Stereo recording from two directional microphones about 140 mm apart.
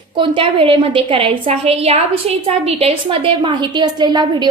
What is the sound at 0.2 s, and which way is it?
A woman's voice, 40° right (ahead or behind).